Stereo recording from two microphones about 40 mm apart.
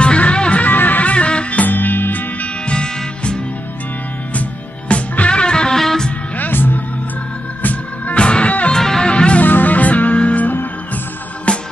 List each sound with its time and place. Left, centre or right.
0.0 s music: left
0.7 s music: left
1.1 s music: left
1.7 s music: left
2.6 s music: left
4.4 s music: left
5.8 s music: centre
6.3 s music: left
8.1 s music: left
8.7 s music: centre
9.0 s music: left
9.4 s music: left